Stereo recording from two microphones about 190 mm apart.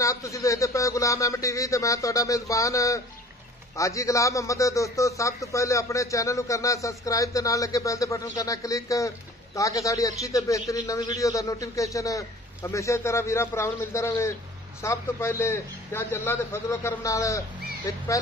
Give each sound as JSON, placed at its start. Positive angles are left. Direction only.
{"t": 0.0, "sound": "a man's voice", "side_deg": 15}